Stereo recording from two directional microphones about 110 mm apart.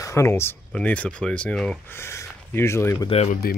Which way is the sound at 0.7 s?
10° left (ahead or behind).